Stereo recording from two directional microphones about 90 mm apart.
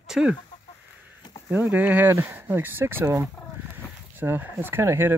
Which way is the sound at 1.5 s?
20° right (ahead or behind).